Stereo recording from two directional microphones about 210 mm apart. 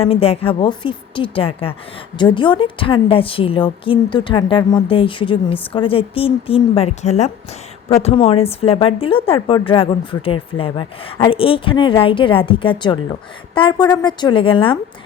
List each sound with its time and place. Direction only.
0.0 s a woman's voice: 30° left (ahead or behind)